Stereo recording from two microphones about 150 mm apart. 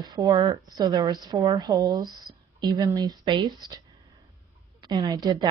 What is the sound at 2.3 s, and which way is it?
Speech, 25° left (ahead or behind).